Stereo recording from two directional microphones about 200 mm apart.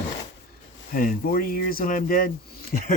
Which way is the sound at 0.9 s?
45° left (ahead or behind).